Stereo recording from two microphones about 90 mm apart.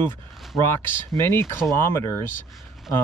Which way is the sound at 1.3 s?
25° left (ahead or behind).